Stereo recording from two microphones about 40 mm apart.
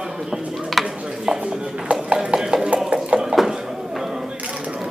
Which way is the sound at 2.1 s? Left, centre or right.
Centre.